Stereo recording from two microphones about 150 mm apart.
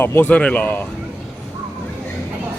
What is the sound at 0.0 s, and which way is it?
Speech, 15° left (ahead or behind).